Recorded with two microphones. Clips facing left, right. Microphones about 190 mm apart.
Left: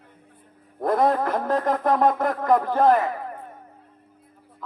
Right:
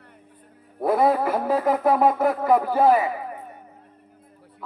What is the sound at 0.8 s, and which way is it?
A man's voice, 5° right (ahead or behind).